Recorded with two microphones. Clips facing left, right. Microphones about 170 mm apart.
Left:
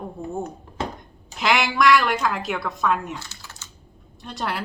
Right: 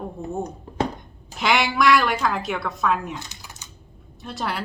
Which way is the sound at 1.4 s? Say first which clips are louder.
Even; centre (ahead or behind).